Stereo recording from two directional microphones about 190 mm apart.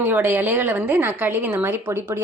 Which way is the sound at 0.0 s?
10° right (ahead or behind).